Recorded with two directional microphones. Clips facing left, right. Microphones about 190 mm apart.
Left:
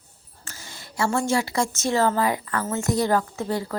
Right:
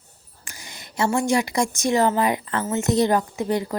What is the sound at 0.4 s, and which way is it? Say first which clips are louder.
A woman's voice: even; 15° right (ahead or behind).